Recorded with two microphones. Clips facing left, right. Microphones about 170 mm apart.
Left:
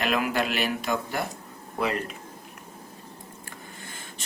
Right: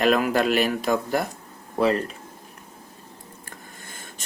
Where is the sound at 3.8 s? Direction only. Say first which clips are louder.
Even; 45° right (ahead or behind).